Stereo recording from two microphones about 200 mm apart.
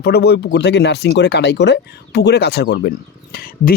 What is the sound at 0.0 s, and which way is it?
Speech, 55° left (ahead or behind).